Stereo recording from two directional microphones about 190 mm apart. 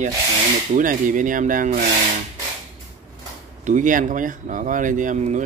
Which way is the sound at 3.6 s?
40° right (ahead or behind).